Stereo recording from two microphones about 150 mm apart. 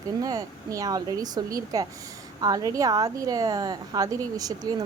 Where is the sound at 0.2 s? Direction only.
25° right (ahead or behind).